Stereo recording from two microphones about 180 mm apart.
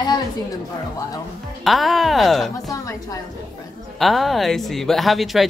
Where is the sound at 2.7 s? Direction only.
20° left (ahead or behind).